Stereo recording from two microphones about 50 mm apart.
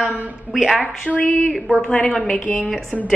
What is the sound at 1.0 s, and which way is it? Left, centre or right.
A woman's voice, left.